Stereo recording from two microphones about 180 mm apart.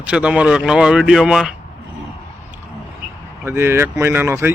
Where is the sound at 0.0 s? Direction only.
5° right (ahead or behind).